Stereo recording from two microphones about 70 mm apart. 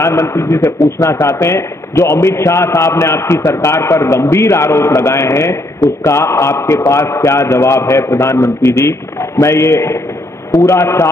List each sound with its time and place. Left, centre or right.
0.0 s a man's voice: left